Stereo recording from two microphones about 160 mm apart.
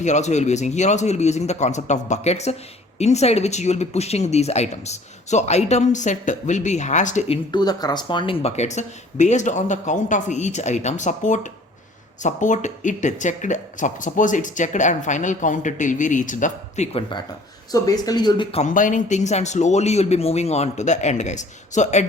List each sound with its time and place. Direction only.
0.0 s speech: 45° left (ahead or behind)
7.5 s speech: 25° left (ahead or behind); by 17.0 s 45° left (ahead or behind)
17.7 s speech: 25° left (ahead or behind)
18.5 s speech: 50° left (ahead or behind)